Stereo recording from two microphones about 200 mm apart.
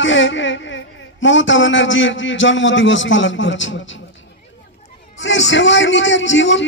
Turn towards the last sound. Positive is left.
turn(degrees=65)  # may be behind; listen again after turning